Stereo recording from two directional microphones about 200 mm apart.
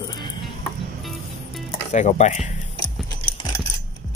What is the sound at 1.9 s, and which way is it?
Speech, 35° left (ahead or behind).